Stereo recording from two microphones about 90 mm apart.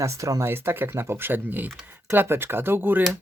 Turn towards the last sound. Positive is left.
turn(degrees=-20)  # may be behind; listen again after turning